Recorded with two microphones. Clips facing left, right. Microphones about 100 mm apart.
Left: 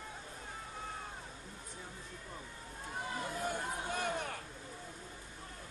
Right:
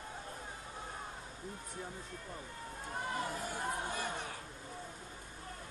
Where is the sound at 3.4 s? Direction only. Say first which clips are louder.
Even; 55° left (ahead or behind).